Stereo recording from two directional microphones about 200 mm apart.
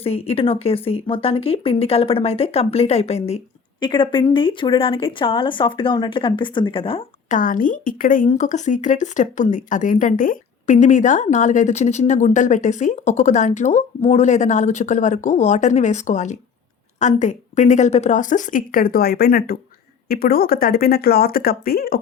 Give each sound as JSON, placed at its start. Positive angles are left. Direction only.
{"t": 0.0, "sound": "speech", "side_deg": 30}
{"t": 7.3, "sound": "a woman's voice", "side_deg": 40}